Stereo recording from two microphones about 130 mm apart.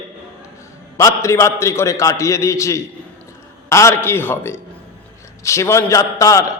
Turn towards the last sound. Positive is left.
turn(degrees=25)  # may be behind; listen again after turning